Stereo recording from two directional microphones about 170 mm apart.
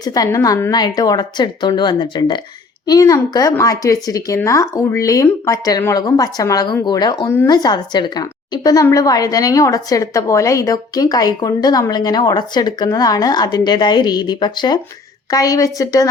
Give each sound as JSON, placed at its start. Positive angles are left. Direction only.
{"t": 0.0, "sound": "speech", "side_deg": 20}